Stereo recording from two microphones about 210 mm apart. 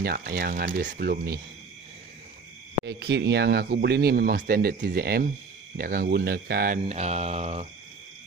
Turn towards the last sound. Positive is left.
turn(degrees=-30)  # may be behind; listen again after turning